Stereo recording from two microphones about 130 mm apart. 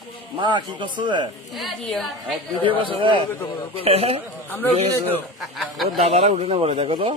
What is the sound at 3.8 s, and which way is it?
Speech, 45° right (ahead or behind).